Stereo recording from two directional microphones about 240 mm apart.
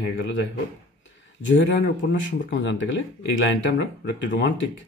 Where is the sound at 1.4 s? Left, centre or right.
Left.